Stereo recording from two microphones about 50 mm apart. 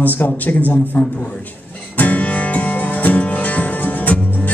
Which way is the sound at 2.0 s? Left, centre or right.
Left.